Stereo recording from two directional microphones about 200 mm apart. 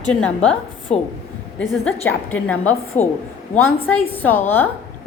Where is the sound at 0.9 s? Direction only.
35° left (ahead or behind).